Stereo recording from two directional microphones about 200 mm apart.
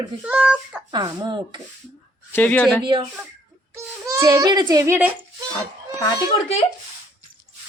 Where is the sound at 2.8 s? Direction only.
25° right (ahead or behind).